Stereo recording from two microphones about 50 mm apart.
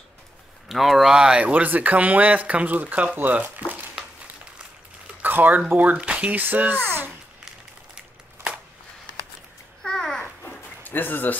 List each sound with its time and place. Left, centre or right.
0.7 s speech: centre
1.5 s speech: right
5.2 s a sound: right
5.7 s speech: right
5.9 s speech: right
9.8 s babbling: centre
10.4 s a sound: left